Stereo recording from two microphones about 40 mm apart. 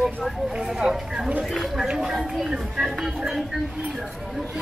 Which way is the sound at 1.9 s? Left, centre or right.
Right.